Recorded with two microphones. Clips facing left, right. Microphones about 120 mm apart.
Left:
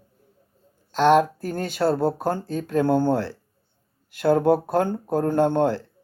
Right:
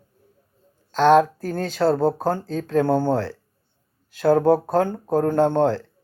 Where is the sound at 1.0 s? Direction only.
45° right (ahead or behind).